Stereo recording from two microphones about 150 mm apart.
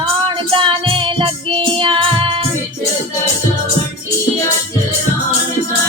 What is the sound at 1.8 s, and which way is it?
Music, 35° right (ahead or behind).